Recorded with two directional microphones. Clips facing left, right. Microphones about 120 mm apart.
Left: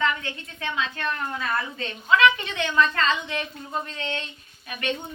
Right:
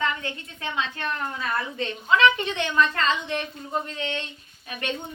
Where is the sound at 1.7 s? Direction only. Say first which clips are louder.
Even; 25° right (ahead or behind).